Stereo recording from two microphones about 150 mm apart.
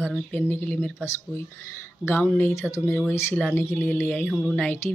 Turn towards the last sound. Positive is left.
turn(degrees=5)  # may be behind; listen again after turning